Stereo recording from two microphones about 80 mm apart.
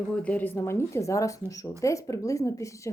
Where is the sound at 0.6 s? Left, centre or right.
Left.